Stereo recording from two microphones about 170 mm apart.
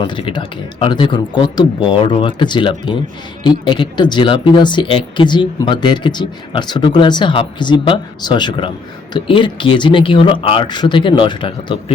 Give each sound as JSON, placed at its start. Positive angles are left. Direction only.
{"t": 0.0, "sound": "speech", "side_deg": 30}